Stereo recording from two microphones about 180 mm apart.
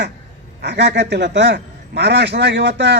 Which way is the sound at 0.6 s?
75° right (ahead or behind).